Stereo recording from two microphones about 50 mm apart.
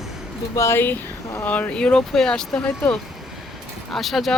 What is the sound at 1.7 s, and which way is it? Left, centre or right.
Speech, centre.